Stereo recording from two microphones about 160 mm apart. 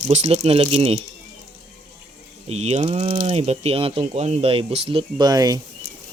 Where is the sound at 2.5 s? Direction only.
40° right (ahead or behind); by 5.6 s 25° right (ahead or behind).